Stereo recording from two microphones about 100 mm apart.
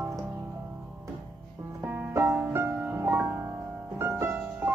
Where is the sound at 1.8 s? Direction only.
20° right (ahead or behind).